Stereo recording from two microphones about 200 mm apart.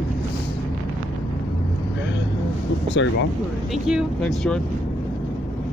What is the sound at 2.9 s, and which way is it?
Speech, 65° left (ahead or behind).